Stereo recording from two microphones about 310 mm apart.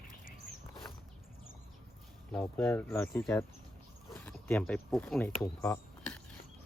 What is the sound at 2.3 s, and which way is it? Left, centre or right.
Speech, centre.